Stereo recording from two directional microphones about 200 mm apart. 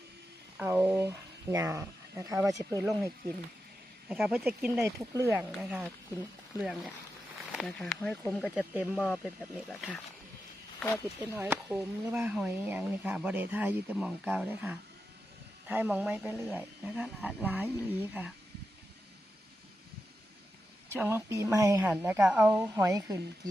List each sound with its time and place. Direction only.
0.5 s speech: 10° right (ahead or behind)
4.1 s speech: 5° right (ahead or behind)
5.1 s speech: 15° right (ahead or behind); by 11.0 s 5° left (ahead or behind)
11.2 s speech: 10° right (ahead or behind)
20.9 s speech: 10° right (ahead or behind)
21.8 s speech: 5° right (ahead or behind)